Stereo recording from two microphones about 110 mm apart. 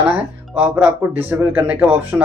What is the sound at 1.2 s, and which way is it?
Speech, 15° right (ahead or behind).